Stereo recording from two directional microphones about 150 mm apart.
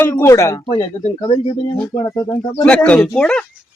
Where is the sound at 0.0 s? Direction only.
15° left (ahead or behind).